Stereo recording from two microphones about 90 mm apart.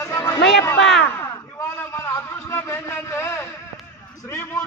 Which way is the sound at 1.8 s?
30° left (ahead or behind).